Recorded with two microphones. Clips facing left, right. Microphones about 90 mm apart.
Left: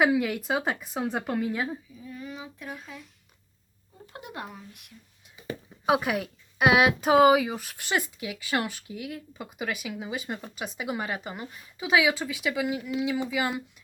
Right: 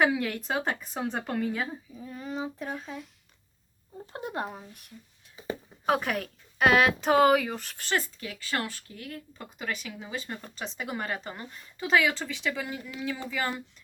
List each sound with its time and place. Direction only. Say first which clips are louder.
0.0 s speech: left 2 dB; 5° left (ahead or behind)
2.0 s speech: right 4 dB; 35° right (ahead or behind)
4.0 s speech: right 5 dB; 35° right (ahead or behind)
5.8 s speech: left 2 dB; 10° left (ahead or behind)